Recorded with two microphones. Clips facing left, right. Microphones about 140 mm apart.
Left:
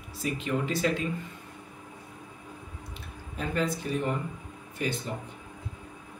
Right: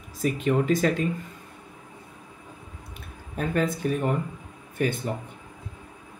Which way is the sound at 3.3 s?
50° right (ahead or behind).